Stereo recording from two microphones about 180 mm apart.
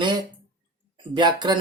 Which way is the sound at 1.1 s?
25° right (ahead or behind).